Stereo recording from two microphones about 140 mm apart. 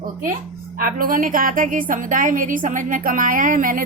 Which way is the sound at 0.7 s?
90° right.